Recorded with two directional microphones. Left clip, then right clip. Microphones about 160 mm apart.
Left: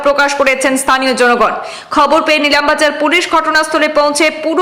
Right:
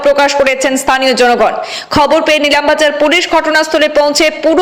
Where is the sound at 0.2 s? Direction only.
15° right (ahead or behind).